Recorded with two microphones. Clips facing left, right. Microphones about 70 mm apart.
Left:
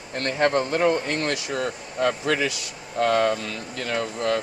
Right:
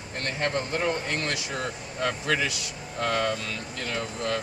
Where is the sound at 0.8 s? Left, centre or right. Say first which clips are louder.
Left 6 dB; left.